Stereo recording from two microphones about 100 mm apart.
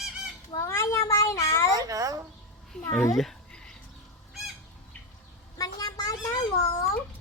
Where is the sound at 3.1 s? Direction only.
5° left (ahead or behind).